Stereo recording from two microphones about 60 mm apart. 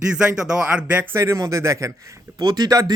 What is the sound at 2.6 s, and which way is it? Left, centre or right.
Speech, right.